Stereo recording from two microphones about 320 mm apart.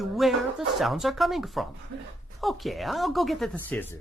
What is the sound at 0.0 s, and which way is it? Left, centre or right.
Speech, centre.